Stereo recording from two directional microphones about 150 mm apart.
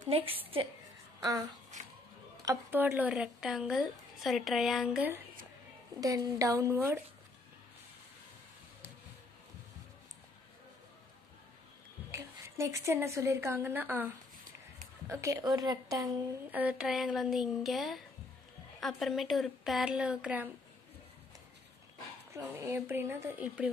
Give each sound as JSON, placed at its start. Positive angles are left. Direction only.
{"t": 0.1, "sound": "a woman's voice", "side_deg": -35}
{"t": 1.2, "sound": "speech", "side_deg": -25}
{"t": 2.7, "sound": "a woman's voice", "side_deg": -10}
{"t": 5.9, "sound": "speech", "side_deg": -25}
{"t": 12.1, "sound": "a woman's voice", "side_deg": -20}
{"t": 16.4, "sound": "a woman's voice", "side_deg": -10}
{"t": 22.3, "sound": "speech", "side_deg": -15}